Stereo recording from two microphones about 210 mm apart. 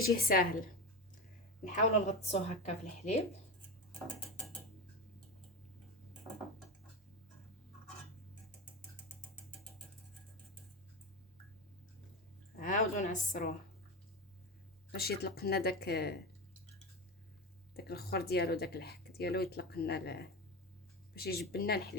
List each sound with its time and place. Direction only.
0.2 s speech: 45° left (ahead or behind)
1.6 s a woman's voice: 30° left (ahead or behind)
12.5 s a woman's voice: 40° left (ahead or behind)
14.9 s speech: 50° left (ahead or behind)
17.7 s speech: 50° left (ahead or behind)